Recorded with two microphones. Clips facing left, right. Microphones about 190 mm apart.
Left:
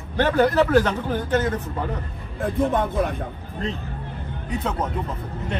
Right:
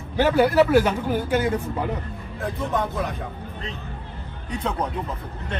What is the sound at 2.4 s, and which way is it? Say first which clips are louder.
Speech: left 4 dB; 50° left (ahead or behind).